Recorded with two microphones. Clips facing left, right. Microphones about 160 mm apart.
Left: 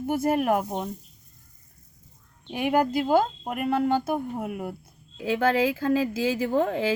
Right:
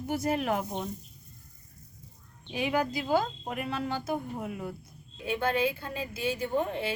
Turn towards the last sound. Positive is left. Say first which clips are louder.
# left 6 dB
turn(degrees=90)